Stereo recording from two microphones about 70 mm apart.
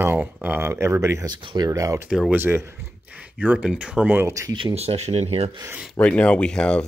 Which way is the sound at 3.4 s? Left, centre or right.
Centre.